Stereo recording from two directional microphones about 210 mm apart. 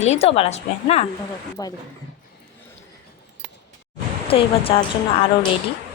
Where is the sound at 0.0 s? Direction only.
30° left (ahead or behind).